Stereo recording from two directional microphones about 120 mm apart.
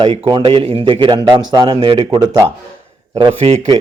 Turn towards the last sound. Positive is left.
turn(degrees=-65)  # may be behind; listen again after turning